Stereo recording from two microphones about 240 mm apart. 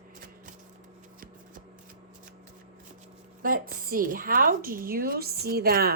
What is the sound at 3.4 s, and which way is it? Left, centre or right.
Speech, right.